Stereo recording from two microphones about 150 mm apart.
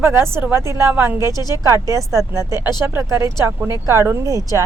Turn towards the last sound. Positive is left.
turn(degrees=-25)  # may be behind; listen again after turning